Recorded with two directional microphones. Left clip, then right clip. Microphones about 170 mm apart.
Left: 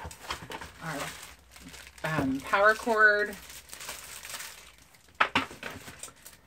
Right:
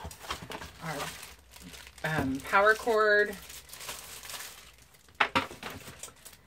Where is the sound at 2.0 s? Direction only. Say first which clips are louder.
Left 1 dB; 20° left (ahead or behind).